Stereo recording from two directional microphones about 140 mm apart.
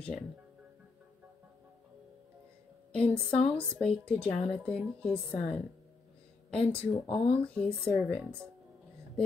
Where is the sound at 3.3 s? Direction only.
40° left (ahead or behind).